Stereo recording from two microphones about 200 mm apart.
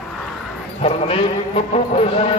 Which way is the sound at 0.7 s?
30° left (ahead or behind).